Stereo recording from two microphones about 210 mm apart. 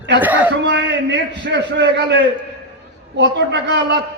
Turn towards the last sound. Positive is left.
turn(degrees=-55)  # may be behind; listen again after turning